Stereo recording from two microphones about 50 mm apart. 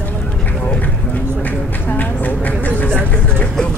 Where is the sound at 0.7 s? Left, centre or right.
Left.